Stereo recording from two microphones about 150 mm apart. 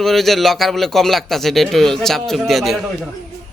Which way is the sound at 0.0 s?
Centre (ahead or behind).